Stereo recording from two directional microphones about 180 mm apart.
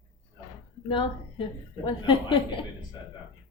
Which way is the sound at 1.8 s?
30° left (ahead or behind).